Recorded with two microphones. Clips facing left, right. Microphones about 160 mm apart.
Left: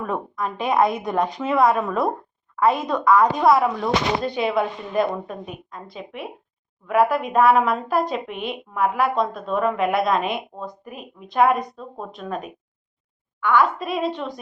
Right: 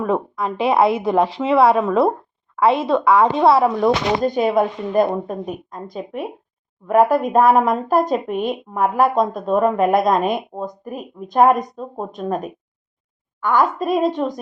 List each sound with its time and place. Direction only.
0.0 s a woman's voice: 30° right (ahead or behind)
4.2 s speech: 45° right (ahead or behind)